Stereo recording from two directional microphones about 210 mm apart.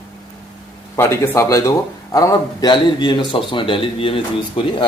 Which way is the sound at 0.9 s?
10° left (ahead or behind).